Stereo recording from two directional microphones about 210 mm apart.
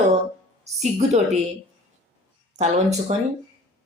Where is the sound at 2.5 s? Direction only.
35° right (ahead or behind).